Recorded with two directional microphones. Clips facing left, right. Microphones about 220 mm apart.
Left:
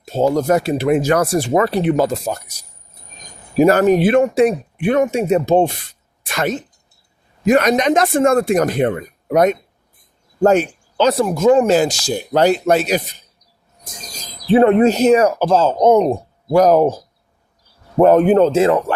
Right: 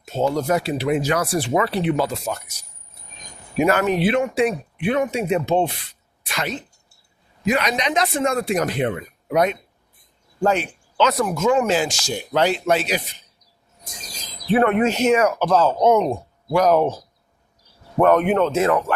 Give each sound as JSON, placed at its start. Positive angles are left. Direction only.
{"t": 0.0, "sound": "speech", "side_deg": 35}
{"t": 11.1, "sound": "speech", "side_deg": 30}
{"t": 14.4, "sound": "speech", "side_deg": 30}